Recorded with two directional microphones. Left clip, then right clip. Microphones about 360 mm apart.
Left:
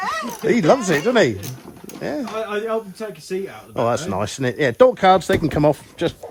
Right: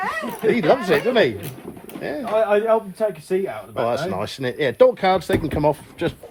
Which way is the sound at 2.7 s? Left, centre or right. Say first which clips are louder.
Right 6 dB; centre.